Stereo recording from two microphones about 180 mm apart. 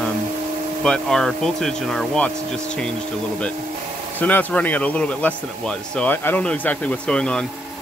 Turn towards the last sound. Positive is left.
turn(degrees=5)  # may be behind; listen again after turning